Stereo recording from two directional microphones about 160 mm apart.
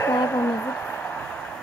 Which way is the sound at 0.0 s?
15° left (ahead or behind).